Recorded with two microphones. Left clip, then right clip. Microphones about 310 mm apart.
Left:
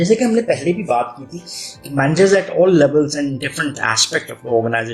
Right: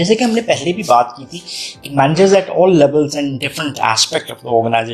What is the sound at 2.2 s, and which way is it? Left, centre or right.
Speech, right.